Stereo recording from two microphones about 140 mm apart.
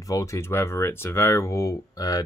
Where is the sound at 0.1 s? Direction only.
20° left (ahead or behind).